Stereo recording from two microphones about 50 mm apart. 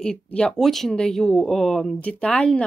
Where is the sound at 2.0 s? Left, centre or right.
Left.